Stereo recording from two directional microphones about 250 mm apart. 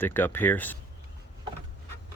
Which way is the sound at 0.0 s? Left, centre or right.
Centre.